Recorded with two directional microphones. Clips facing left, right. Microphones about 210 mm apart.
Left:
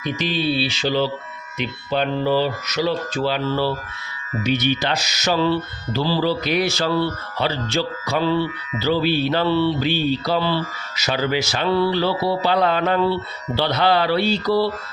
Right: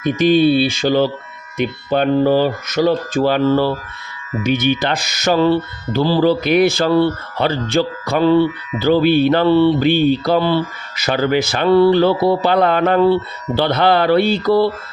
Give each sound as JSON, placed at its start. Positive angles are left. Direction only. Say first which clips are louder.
{"t": 0.0, "sound": "speech", "louder": "right 10 dB", "side_deg": -50}